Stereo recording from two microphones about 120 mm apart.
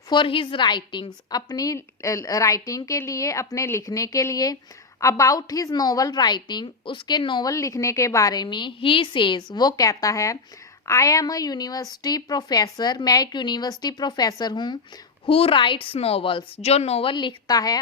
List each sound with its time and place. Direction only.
0.1 s a woman's voice: 45° left (ahead or behind)
7.5 s speech: 25° left (ahead or behind)
15.3 s a woman's voice: 50° left (ahead or behind); by 17.7 s 30° left (ahead or behind)